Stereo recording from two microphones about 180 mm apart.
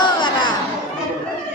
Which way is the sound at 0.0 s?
25° left (ahead or behind).